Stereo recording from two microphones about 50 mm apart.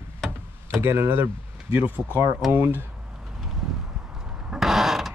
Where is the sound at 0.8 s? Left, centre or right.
Right.